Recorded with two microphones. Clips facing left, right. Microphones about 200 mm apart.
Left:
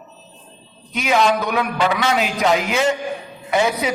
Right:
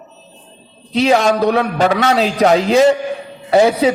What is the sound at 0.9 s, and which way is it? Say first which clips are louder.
A man's voice: right 5 dB; 35° right (ahead or behind).